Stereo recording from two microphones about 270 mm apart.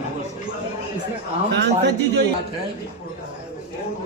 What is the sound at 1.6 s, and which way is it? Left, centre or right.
Speech, right.